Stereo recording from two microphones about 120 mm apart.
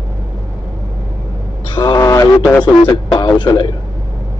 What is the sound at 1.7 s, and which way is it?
Music, 35° left (ahead or behind).